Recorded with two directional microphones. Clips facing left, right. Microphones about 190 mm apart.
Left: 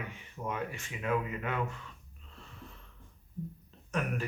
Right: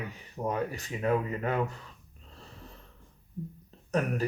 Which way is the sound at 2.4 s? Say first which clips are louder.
Right 1 dB; 35° right (ahead or behind).